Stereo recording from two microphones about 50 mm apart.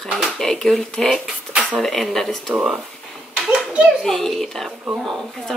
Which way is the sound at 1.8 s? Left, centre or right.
Centre.